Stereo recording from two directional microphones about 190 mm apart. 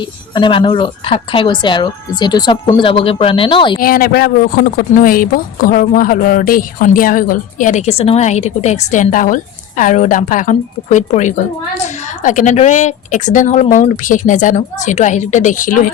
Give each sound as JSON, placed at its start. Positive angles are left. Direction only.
{"t": 0.3, "sound": "speech", "side_deg": 25}
{"t": 3.8, "sound": "a woman's voice", "side_deg": 50}